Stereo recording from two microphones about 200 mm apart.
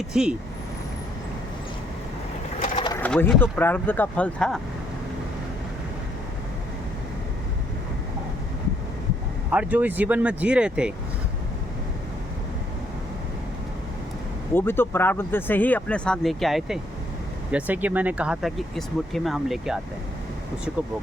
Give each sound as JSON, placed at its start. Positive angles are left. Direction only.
{"t": 0.1, "sound": "speech", "side_deg": -5}
{"t": 2.7, "sound": "pigeon", "side_deg": 25}
{"t": 3.0, "sound": "speech", "side_deg": 10}
{"t": 9.5, "sound": "speech", "side_deg": -5}
{"t": 14.5, "sound": "speech", "side_deg": 10}